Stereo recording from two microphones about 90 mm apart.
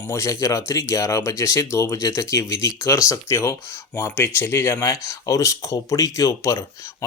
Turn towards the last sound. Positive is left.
turn(degrees=30)  # may be behind; listen again after turning